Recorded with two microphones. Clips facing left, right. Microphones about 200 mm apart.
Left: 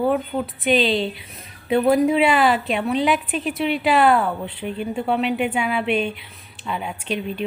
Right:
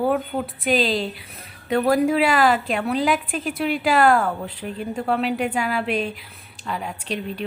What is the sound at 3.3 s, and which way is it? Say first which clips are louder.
Speech: left 2 dB; 45° right (ahead or behind).